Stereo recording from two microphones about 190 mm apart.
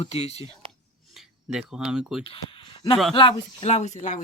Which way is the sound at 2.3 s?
25° left (ahead or behind).